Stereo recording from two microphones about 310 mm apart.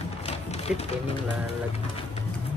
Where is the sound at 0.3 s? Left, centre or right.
Centre.